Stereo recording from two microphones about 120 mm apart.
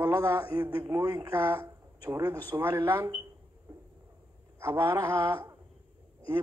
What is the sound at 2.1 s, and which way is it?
Speech, 30° right (ahead or behind).